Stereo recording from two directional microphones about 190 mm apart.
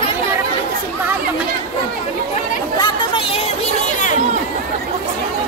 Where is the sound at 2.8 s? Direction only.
25° left (ahead or behind).